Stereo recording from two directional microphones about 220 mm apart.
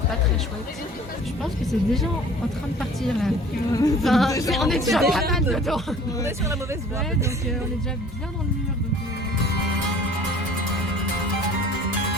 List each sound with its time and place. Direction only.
1.4 s speech: centre (ahead or behind)
3.7 s speech: 15° left (ahead or behind)
4.0 s speech: centre (ahead or behind)
4.3 s speech: 15° left (ahead or behind)
4.5 s speech: centre (ahead or behind)
6.2 s speech: 15° right (ahead or behind)